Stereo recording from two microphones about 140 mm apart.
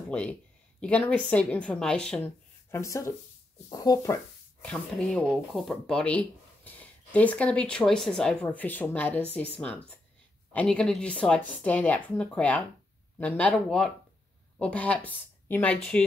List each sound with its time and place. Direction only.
0.1 s speech: 10° left (ahead or behind)
2.7 s speech: 20° left (ahead or behind)
4.6 s speech: 5° left (ahead or behind)